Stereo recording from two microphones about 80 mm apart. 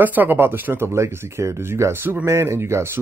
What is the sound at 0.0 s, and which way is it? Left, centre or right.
Speech, right.